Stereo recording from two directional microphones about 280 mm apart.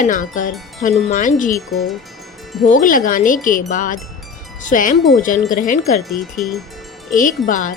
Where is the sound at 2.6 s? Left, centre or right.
Left.